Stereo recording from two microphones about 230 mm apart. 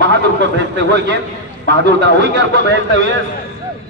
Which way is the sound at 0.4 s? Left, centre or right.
Right.